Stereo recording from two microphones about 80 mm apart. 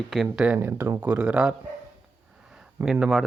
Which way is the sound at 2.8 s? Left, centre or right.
Right.